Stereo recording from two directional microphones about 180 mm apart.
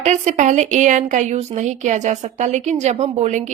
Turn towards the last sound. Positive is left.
turn(degrees=-40)  # may be behind; listen again after turning